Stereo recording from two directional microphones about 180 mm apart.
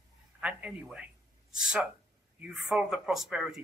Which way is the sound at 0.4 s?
5° right (ahead or behind).